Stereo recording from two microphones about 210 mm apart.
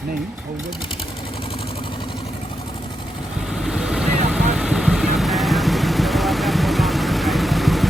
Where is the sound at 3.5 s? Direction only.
Centre (ahead or behind).